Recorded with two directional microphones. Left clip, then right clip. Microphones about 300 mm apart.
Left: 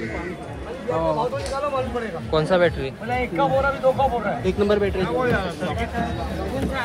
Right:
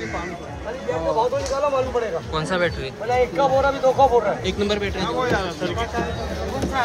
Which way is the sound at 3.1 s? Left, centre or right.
Right.